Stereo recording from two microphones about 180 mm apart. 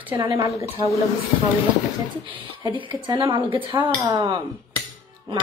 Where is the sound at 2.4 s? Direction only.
30° right (ahead or behind).